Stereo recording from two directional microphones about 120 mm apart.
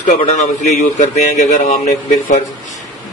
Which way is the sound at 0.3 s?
85° left.